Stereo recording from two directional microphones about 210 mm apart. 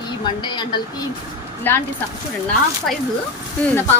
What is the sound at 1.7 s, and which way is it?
Speech, 10° left (ahead or behind).